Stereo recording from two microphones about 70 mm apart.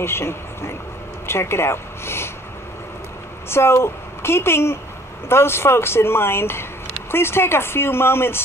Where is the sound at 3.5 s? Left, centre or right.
Left.